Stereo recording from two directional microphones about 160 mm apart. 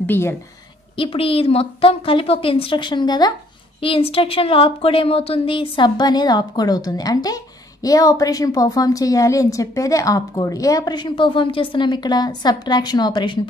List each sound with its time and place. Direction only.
0.0 s speech: 15° left (ahead or behind)
0.9 s a woman's voice: 35° left (ahead or behind)